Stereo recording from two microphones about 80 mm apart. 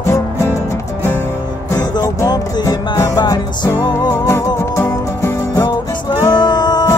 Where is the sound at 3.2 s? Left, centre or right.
Left.